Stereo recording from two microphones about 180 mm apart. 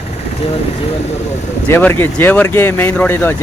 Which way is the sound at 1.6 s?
10° left (ahead or behind).